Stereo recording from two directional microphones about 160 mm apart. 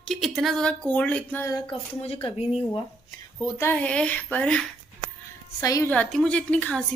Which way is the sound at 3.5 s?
15° left (ahead or behind).